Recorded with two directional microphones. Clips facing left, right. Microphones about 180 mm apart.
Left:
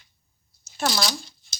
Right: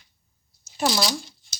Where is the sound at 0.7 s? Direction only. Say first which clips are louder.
Right 2 dB; 10° right (ahead or behind).